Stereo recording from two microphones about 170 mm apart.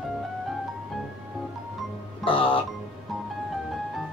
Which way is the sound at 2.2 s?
30° left (ahead or behind).